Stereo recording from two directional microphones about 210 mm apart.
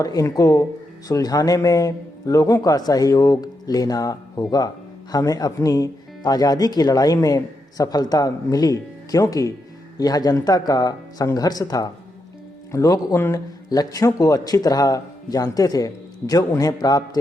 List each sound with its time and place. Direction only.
0.0 s speech: 15° left (ahead or behind)